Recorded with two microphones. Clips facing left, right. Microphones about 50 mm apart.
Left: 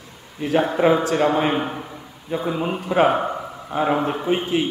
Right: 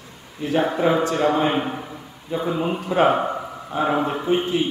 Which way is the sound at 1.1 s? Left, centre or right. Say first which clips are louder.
Left 1 dB; centre.